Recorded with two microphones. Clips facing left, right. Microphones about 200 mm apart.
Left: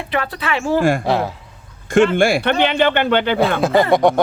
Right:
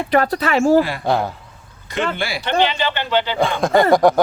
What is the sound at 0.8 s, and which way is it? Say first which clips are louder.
Speech: left 2 dB; 50° left (ahead or behind).